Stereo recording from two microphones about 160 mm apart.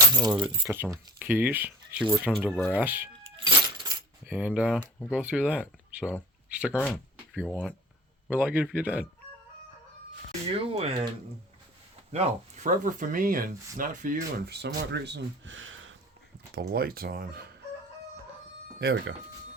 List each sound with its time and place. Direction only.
0.1 s speech: 25° right (ahead or behind)
0.6 s speech: 15° right (ahead or behind)
2.8 s speech: 10° right (ahead or behind)
3.3 s keys jangling: 25° right (ahead or behind)
4.3 s speech: 10° right (ahead or behind)
10.5 s speech: 35° right (ahead or behind)
12.1 s speech: 45° right (ahead or behind)
14.5 s speech: 90° right
16.6 s speech: 70° right (ahead or behind)